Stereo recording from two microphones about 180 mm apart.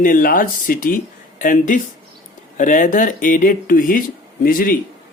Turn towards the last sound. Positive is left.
turn(degrees=50)  # may be behind; listen again after turning